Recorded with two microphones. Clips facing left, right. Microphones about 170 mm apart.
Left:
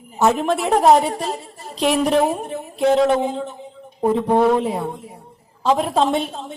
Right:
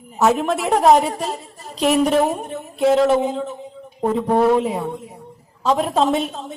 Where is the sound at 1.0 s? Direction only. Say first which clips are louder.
Even; 35° left (ahead or behind).